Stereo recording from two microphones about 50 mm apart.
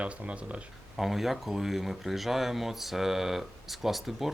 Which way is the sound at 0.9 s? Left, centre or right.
Centre.